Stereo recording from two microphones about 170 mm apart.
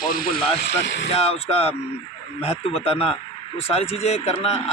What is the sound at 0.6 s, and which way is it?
Speech, 90° left.